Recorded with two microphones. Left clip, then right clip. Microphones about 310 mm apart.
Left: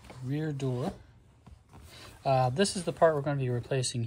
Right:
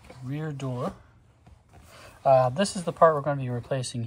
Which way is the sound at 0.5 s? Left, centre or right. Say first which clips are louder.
Even; left.